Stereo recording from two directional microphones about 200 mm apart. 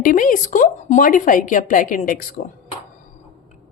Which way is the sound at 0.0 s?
45° left (ahead or behind).